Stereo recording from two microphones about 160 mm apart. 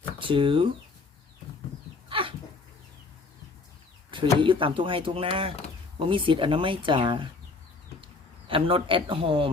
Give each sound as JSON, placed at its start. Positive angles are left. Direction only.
{"t": 0.2, "sound": "speech", "side_deg": -30}
{"t": 2.0, "sound": "dog", "side_deg": -35}
{"t": 4.4, "sound": "speech", "side_deg": -30}
{"t": 8.4, "sound": "speech", "side_deg": -35}